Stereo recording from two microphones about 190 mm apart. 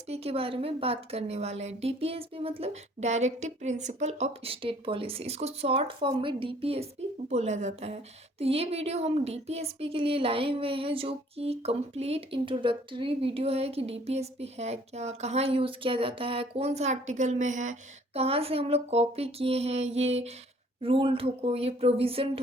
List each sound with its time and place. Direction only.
0.1 s a woman's voice: 30° right (ahead or behind)